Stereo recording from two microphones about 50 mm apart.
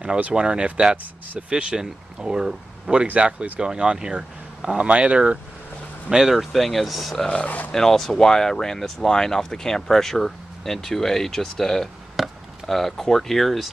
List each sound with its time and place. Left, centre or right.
0.0 s speech: centre
6.0 s speech: centre
7.2 s speech: left
7.7 s speech: centre
12.2 s chop: centre
12.6 s speech: centre